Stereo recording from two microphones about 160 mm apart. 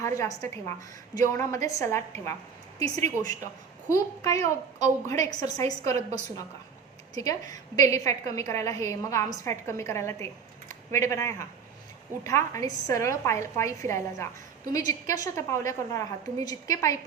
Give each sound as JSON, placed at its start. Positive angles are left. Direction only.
{"t": 0.0, "sound": "a woman's voice", "side_deg": 20}
{"t": 7.1, "sound": "a woman's voice", "side_deg": 20}